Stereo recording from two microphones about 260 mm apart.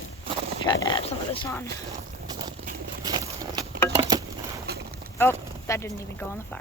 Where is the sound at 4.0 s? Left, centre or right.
Centre.